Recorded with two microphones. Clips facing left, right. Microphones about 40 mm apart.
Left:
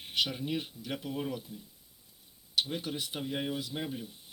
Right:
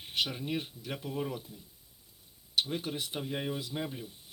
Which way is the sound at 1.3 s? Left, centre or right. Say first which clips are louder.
Left 1 dB; right.